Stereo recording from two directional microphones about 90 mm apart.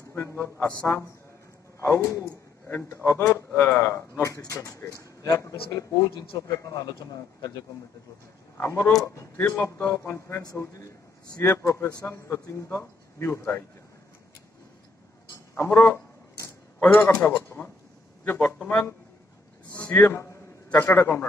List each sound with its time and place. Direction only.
0.1 s speech: 25° left (ahead or behind)
2.6 s a man's voice: 20° left (ahead or behind)
4.2 s speech: 35° left (ahead or behind)
8.5 s speech: 25° left (ahead or behind)
8.9 s speech: 35° left (ahead or behind)
9.6 s speech: 20° left (ahead or behind)
15.5 s a man's voice: 25° left (ahead or behind)